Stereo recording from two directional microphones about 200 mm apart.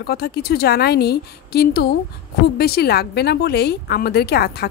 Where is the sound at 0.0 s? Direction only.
55° left (ahead or behind).